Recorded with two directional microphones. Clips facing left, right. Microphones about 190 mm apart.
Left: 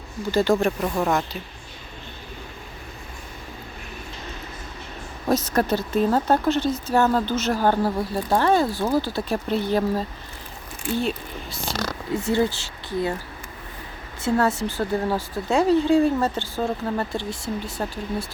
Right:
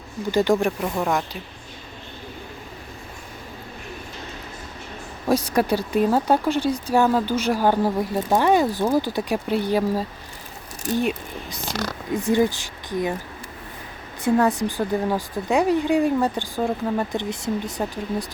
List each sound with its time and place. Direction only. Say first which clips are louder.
0.3 s speech: even; 15° right (ahead or behind)
5.3 s speech: right 1 dB; 10° right (ahead or behind)
14.2 s speech: right 2 dB; 15° right (ahead or behind)